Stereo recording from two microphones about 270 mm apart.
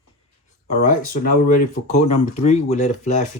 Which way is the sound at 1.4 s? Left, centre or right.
Left.